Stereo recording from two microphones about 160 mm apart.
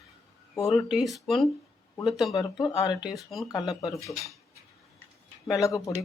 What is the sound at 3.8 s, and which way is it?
Speech, 20° left (ahead or behind).